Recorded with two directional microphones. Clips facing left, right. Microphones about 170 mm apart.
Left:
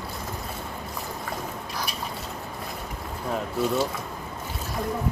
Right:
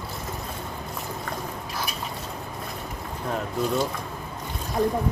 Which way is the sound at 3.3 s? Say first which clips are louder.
Left 1 dB; centre (ahead or behind).